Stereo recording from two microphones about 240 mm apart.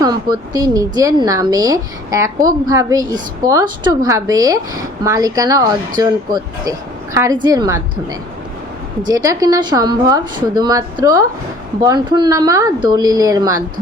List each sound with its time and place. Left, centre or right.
0.0 s a woman's voice: centre
9.0 s a woman's voice: centre